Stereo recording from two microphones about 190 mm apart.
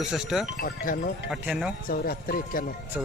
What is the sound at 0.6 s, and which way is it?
Speech, 45° left (ahead or behind).